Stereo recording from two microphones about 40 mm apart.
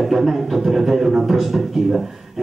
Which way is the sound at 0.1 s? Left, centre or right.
Centre.